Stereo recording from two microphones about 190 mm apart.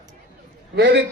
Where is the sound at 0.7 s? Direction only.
65° right (ahead or behind).